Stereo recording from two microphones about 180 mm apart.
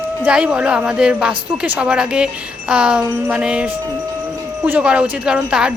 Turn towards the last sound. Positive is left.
turn(degrees=-5)  # may be behind; listen again after turning